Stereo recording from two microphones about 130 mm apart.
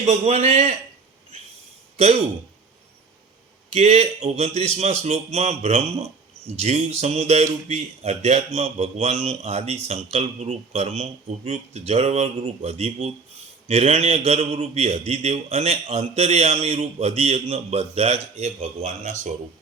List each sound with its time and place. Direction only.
0.0 s a man's voice: 55° right (ahead or behind)
2.0 s a man's voice: 55° right (ahead or behind)
3.7 s a man's voice: 60° right (ahead or behind)